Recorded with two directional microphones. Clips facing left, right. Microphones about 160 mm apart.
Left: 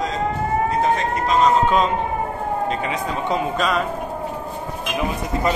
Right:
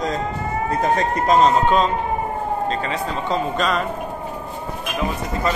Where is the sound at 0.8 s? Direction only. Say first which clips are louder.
Even; 45° right (ahead or behind).